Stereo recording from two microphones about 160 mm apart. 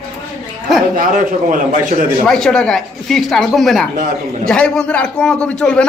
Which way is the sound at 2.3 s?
Centre (ahead or behind).